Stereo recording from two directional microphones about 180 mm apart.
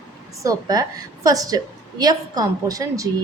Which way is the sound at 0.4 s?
20° right (ahead or behind).